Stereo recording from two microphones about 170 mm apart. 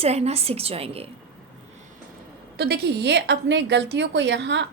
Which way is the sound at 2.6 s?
70° right (ahead or behind).